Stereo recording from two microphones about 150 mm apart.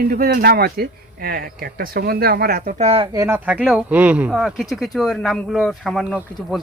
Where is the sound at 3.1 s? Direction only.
20° right (ahead or behind).